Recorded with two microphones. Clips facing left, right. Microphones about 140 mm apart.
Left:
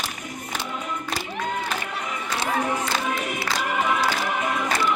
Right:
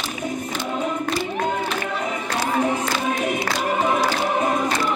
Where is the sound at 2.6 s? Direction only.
25° right (ahead or behind).